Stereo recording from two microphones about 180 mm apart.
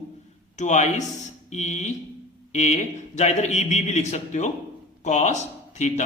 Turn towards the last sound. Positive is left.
turn(degrees=40)  # may be behind; listen again after turning